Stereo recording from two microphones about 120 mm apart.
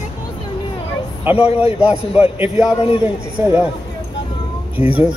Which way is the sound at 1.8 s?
10° right (ahead or behind).